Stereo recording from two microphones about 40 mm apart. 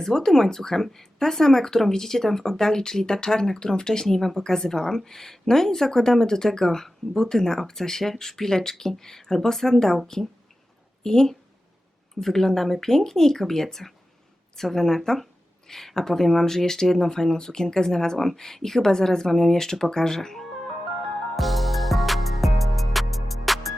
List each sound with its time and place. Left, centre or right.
0.0 s speech: centre
21.3 s music: centre